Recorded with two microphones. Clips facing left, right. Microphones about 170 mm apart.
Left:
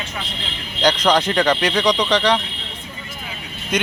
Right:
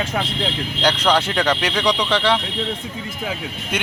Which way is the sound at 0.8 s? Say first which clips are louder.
Left 2 dB; 10° left (ahead or behind).